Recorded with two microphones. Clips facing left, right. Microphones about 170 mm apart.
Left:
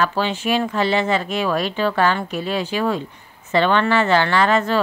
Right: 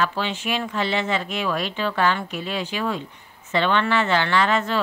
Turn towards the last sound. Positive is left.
turn(degrees=45)  # may be behind; listen again after turning